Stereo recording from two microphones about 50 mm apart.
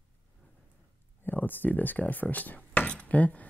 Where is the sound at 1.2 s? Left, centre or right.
Left.